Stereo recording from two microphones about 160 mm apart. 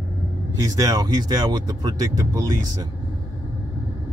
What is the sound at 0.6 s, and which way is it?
Speech, 20° right (ahead or behind).